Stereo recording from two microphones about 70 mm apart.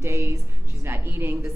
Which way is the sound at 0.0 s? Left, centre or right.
Right.